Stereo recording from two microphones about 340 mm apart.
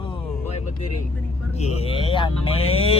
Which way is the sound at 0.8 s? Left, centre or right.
Left.